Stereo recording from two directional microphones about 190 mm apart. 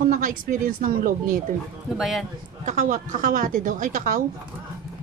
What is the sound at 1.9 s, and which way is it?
Speech, centre (ahead or behind).